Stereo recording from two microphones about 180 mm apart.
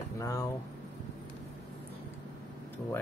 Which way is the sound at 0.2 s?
20° left (ahead or behind).